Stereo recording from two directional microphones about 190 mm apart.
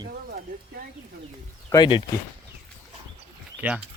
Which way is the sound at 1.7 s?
25° left (ahead or behind).